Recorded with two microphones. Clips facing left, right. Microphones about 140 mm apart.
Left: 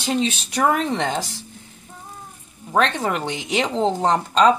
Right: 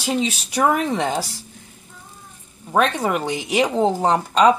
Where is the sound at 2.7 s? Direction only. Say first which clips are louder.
Right 1 dB; 10° right (ahead or behind).